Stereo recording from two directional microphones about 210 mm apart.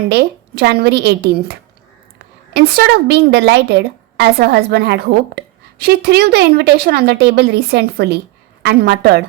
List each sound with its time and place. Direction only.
0.1 s a woman's voice: 50° right (ahead or behind)
2.5 s a woman's voice: 50° right (ahead or behind)